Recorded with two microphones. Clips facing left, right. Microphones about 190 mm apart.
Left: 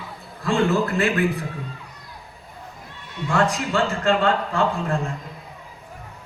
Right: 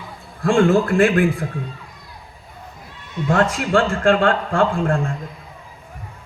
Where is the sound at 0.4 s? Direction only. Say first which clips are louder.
Right 5 dB; 50° right (ahead or behind).